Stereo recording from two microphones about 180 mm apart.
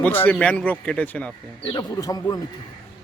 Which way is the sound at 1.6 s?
25° left (ahead or behind).